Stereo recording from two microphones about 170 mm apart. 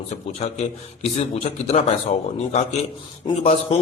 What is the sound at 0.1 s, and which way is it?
A man's voice, 40° left (ahead or behind).